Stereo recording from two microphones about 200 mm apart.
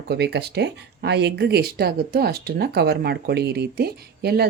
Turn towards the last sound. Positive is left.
turn(degrees=-50)  # may be behind; listen again after turning